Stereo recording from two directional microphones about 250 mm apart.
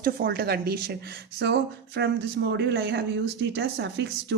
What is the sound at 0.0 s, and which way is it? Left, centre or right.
Speech, right.